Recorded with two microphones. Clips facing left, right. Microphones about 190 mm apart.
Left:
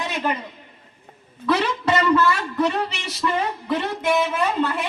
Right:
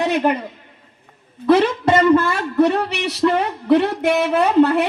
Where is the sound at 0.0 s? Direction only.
60° right (ahead or behind).